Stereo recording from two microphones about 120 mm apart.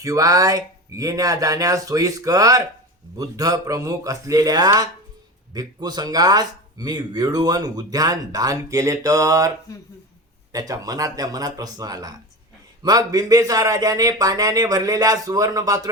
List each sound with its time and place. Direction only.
0.0 s speech: 30° right (ahead or behind)
10.5 s speech: 30° right (ahead or behind)